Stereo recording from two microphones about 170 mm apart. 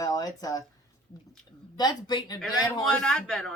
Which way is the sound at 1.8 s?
25° left (ahead or behind).